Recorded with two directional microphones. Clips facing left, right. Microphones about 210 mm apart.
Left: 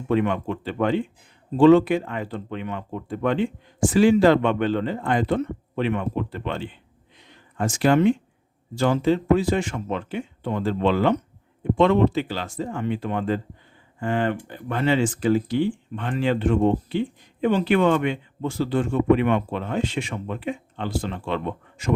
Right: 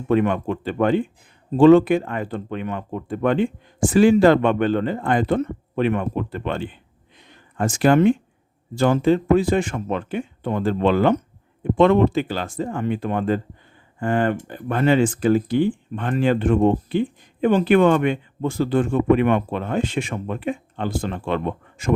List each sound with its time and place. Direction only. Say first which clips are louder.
0.1 s speech: right 3 dB; 50° right (ahead or behind)
7.2 s a sound: right 3 dB; 50° right (ahead or behind)
8.7 s speech: right 3 dB; 50° right (ahead or behind)